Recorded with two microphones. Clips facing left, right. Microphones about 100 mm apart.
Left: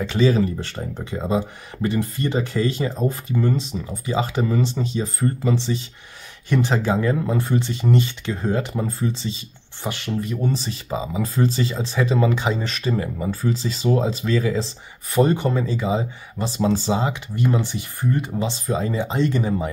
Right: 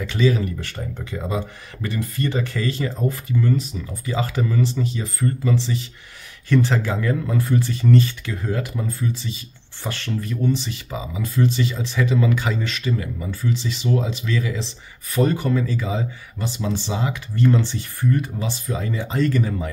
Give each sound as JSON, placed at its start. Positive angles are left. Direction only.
{"t": 0.0, "sound": "speech", "side_deg": 30}
{"t": 9.8, "sound": "speech", "side_deg": 15}
{"t": 10.4, "sound": "speech", "side_deg": 35}
{"t": 15.1, "sound": "speech", "side_deg": 25}
{"t": 17.4, "sound": "speech", "side_deg": 15}